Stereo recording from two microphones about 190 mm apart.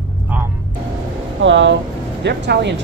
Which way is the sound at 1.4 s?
75° right (ahead or behind).